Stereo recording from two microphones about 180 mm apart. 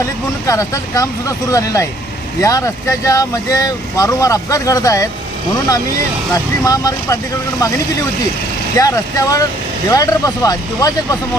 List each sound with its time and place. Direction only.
0.0 s speech: 15° left (ahead or behind)
6.3 s speech: 20° left (ahead or behind)
8.7 s speech: 20° left (ahead or behind)